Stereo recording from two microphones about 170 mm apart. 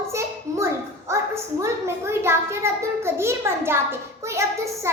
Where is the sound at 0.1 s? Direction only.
15° right (ahead or behind).